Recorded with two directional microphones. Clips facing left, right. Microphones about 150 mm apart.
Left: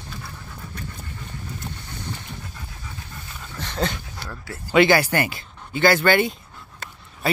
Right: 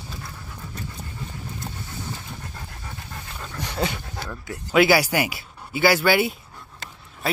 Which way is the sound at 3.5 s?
10° right (ahead or behind).